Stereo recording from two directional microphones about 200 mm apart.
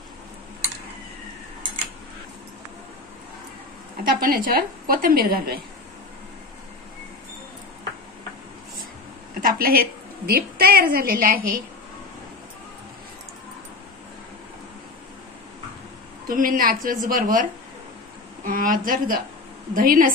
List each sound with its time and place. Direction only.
4.0 s a woman's voice: 45° right (ahead or behind)
9.4 s a sound: 45° right (ahead or behind)
10.2 s a woman's voice: 50° right (ahead or behind)
16.3 s a woman's voice: 45° right (ahead or behind)